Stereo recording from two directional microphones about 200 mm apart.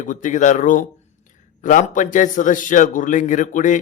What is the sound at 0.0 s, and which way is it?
A man's voice, 40° left (ahead or behind).